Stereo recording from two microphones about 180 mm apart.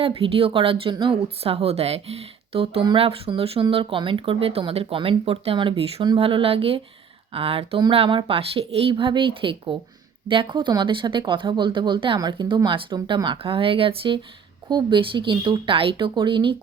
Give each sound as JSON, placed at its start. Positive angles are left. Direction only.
{"t": 0.0, "sound": "speech", "side_deg": -30}